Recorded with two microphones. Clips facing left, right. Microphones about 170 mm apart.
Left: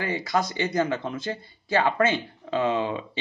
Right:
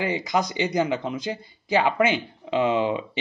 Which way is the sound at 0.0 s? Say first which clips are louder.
Right 2 dB; 20° right (ahead or behind).